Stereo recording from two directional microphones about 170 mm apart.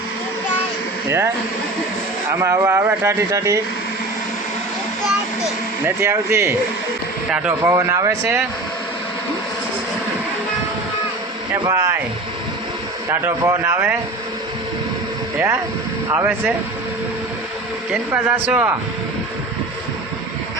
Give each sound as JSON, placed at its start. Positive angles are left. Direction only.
{"t": 2.4, "sound": "speech", "side_deg": -15}
{"t": 5.4, "sound": "speech", "side_deg": -15}
{"t": 11.6, "sound": "speech", "side_deg": -20}
{"t": 13.1, "sound": "speech", "side_deg": -20}
{"t": 16.0, "sound": "speech", "side_deg": -15}
{"t": 17.9, "sound": "speech", "side_deg": -10}